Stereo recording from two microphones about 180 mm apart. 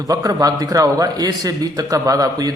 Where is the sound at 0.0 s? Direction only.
20° right (ahead or behind).